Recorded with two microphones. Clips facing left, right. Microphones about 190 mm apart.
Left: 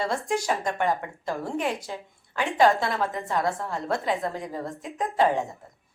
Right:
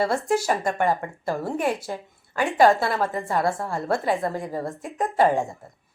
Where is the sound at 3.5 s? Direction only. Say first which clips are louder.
Right 3 dB; 45° right (ahead or behind).